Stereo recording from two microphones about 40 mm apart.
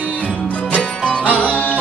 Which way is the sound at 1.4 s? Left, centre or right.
Left.